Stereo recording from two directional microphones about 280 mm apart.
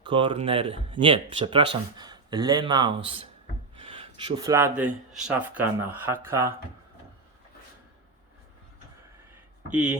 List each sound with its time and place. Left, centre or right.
0.0 s speech: centre